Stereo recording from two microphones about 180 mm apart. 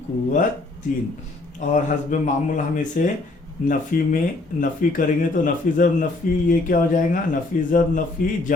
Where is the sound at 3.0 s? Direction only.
50° left (ahead or behind).